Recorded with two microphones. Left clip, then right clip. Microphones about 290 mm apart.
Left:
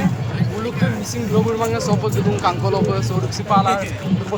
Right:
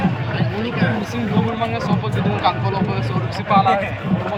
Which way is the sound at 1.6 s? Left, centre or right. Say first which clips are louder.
Left 2 dB; centre.